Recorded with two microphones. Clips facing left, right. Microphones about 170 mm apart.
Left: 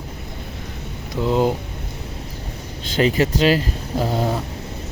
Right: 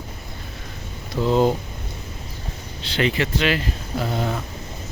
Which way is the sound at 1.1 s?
10° left (ahead or behind).